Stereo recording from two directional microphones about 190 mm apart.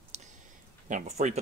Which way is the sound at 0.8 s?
40° right (ahead or behind).